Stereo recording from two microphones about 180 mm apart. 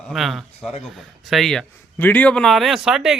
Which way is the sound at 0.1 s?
Centre (ahead or behind).